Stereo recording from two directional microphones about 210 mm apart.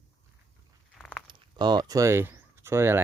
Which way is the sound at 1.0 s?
Centre (ahead or behind).